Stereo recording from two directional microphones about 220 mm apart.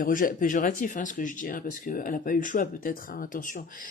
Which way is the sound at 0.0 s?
40° left (ahead or behind).